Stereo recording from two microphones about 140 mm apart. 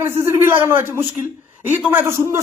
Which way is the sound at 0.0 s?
20° right (ahead or behind).